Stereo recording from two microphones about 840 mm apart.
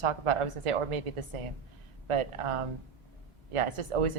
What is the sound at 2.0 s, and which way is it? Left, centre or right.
Speech, right.